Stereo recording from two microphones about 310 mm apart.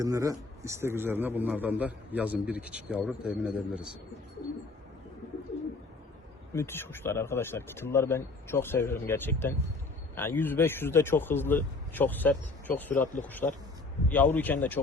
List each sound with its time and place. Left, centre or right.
0.0 s a man's voice: centre
6.5 s a man's voice: centre